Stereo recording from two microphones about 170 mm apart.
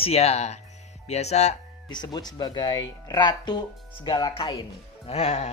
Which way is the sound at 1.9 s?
25° left (ahead or behind).